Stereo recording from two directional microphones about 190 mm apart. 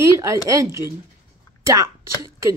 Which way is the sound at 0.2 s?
15° right (ahead or behind).